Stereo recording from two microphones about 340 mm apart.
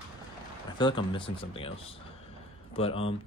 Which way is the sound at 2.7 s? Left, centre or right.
Centre.